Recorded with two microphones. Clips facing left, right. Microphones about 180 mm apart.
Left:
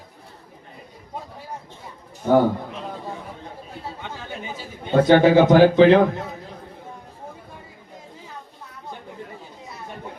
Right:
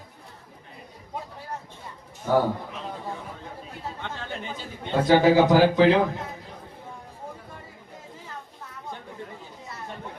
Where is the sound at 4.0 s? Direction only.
10° left (ahead or behind).